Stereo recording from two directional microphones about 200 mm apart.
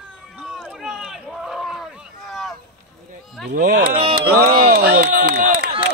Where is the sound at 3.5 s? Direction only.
40° right (ahead or behind).